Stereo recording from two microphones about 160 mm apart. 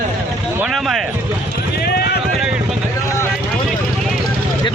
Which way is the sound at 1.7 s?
80° left.